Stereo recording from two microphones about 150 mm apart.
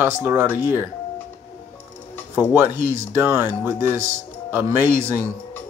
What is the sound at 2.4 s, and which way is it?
Speech, 15° right (ahead or behind).